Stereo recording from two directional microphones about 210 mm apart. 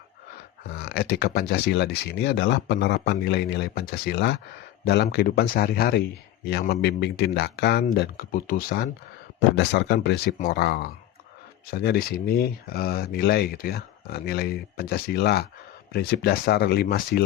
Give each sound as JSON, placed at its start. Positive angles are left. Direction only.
{"t": 0.7, "sound": "speech", "side_deg": 50}
{"t": 9.6, "sound": "speech", "side_deg": 55}